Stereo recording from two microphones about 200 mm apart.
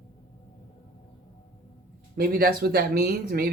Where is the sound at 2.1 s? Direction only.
50° right (ahead or behind).